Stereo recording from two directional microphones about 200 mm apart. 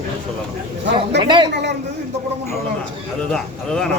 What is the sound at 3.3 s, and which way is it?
Speech, 5° left (ahead or behind).